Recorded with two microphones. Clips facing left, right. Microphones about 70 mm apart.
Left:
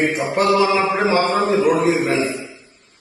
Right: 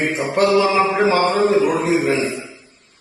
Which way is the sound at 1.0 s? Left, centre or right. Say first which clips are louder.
Right 2 dB; centre.